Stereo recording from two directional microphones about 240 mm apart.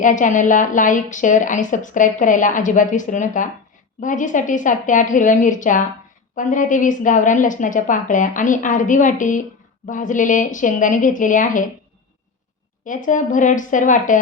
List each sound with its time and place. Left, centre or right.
0.0 s speech: left
12.8 s speech: left